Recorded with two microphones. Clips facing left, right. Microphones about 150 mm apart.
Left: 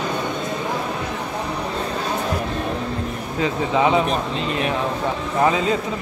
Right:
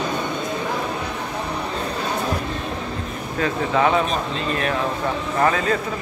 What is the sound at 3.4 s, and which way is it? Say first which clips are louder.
Speech: even; 15° left (ahead or behind).